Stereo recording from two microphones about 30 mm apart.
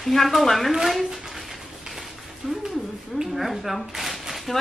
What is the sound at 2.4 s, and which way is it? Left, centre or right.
Speech, left.